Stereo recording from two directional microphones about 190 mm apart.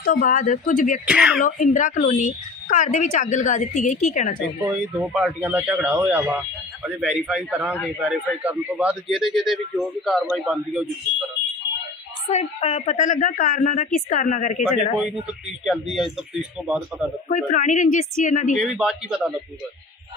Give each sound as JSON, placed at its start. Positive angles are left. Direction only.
{"t": 0.0, "sound": "speech", "side_deg": 45}
{"t": 1.0, "sound": "a man's voice", "side_deg": -5}
{"t": 1.4, "sound": "a woman's voice", "side_deg": 45}
{"t": 4.6, "sound": "a man's voice", "side_deg": -5}
{"t": 12.3, "sound": "speech", "side_deg": 35}
{"t": 15.3, "sound": "a man's voice", "side_deg": -5}
{"t": 17.2, "sound": "a woman's voice", "side_deg": 45}
{"t": 18.5, "sound": "a man's voice", "side_deg": -5}